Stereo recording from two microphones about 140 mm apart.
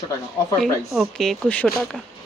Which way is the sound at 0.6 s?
Centre (ahead or behind).